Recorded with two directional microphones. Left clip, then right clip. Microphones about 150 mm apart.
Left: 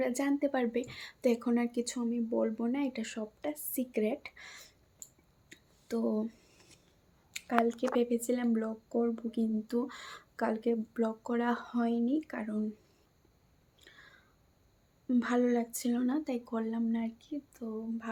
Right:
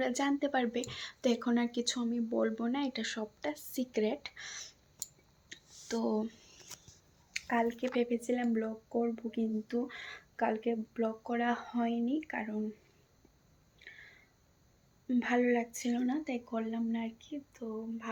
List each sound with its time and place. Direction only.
0.0 s speech: 25° left (ahead or behind)
5.5 s a sound: 25° left (ahead or behind)
7.3 s speech: 25° left (ahead or behind)
15.0 s speech: 35° left (ahead or behind)